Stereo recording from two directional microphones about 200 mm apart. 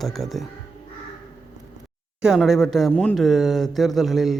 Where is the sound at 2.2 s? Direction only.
Centre (ahead or behind).